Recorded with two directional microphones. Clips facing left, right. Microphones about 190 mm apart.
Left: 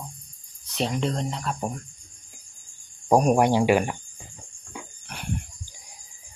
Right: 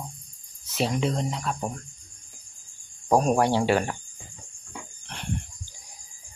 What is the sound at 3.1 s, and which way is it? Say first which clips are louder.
Speech: left 2 dB; 15° left (ahead or behind).